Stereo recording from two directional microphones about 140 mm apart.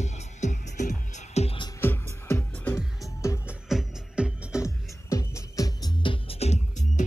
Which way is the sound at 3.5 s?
5° right (ahead or behind).